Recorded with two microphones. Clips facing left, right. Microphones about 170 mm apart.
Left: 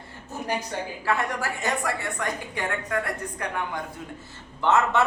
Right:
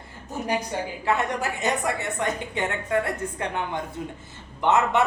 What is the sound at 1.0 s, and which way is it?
A woman's voice, 20° right (ahead or behind).